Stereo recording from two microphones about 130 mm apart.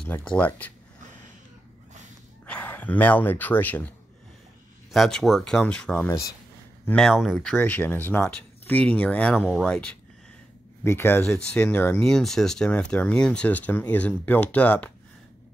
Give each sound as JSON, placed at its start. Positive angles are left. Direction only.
{"t": 0.2, "sound": "speech", "side_deg": 10}
{"t": 2.4, "sound": "speech", "side_deg": 10}
{"t": 4.9, "sound": "speech", "side_deg": 0}
{"t": 6.0, "sound": "speech", "side_deg": 20}
{"t": 6.9, "sound": "speech", "side_deg": 5}
{"t": 10.8, "sound": "speech", "side_deg": 20}